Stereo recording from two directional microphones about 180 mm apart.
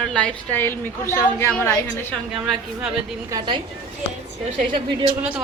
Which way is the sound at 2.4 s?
5° right (ahead or behind).